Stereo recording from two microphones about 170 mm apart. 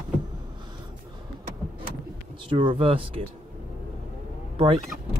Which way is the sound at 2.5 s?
30° right (ahead or behind).